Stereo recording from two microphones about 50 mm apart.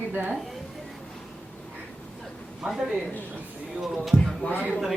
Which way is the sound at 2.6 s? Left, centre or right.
Centre.